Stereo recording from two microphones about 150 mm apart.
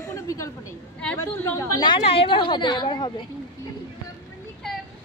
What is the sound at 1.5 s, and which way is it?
A woman's voice, 25° left (ahead or behind).